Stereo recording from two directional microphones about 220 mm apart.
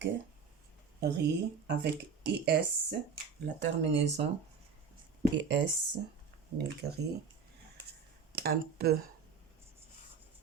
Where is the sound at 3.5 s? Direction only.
55° right (ahead or behind).